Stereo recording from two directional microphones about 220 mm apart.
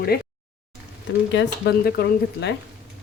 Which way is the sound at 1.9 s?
50° left (ahead or behind).